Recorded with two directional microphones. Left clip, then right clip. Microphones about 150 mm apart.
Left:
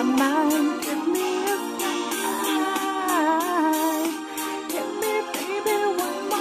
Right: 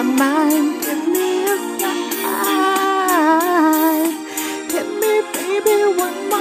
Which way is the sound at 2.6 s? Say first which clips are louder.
Right 9 dB; 30° right (ahead or behind).